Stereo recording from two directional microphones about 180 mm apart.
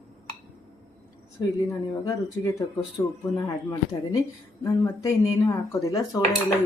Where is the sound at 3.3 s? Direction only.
20° left (ahead or behind).